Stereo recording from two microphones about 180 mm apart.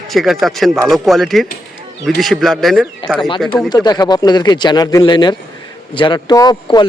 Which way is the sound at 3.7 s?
25° left (ahead or behind).